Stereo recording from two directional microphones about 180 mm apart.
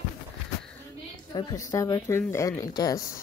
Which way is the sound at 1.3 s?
20° left (ahead or behind).